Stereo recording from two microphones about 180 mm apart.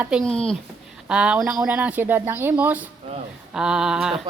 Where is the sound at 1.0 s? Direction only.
5° right (ahead or behind).